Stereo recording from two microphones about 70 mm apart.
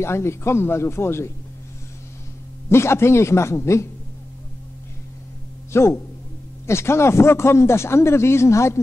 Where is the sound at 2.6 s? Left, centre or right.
Left.